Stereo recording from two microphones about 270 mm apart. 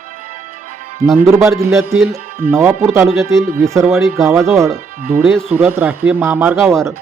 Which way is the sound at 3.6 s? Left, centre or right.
Centre.